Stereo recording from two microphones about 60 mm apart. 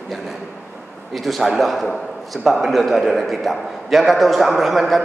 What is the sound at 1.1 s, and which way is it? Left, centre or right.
A man's voice, centre.